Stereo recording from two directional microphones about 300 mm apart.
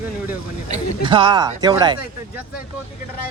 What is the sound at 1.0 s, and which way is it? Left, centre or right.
Speech, centre.